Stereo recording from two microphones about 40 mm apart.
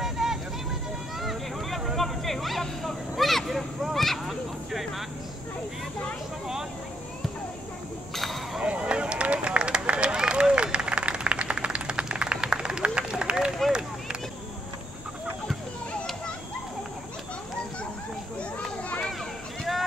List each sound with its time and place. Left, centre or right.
0.0 s vehicle: centre
2.0 s a sound: centre
2.8 s vehicle: centre
8.6 s run: right
10.5 s applause: right
13.7 s run: right